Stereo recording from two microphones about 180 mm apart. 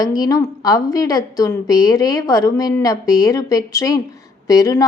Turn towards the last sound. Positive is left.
turn(degrees=20)  # may be behind; listen again after turning